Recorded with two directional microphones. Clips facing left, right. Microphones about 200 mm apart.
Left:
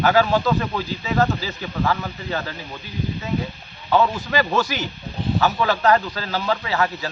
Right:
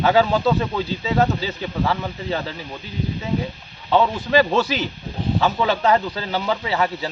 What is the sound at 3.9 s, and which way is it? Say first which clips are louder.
A man's voice: right 2 dB; 25° right (ahead or behind).